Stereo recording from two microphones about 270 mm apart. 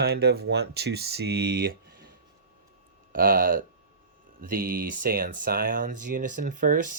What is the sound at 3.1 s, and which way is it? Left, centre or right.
Speech, right.